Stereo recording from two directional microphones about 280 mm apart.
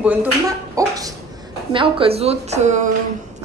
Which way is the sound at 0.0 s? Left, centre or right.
Centre.